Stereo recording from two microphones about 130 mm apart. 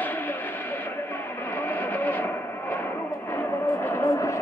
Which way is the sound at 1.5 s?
15° left (ahead or behind).